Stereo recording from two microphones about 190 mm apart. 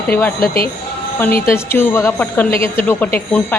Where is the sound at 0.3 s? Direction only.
50° left (ahead or behind).